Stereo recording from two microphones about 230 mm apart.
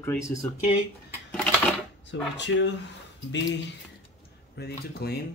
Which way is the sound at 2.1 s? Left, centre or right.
Left.